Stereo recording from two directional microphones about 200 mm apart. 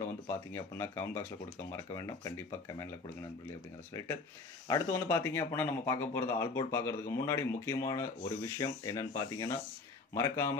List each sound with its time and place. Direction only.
0.0 s speech: 15° left (ahead or behind)
4.6 s speech: 15° left (ahead or behind)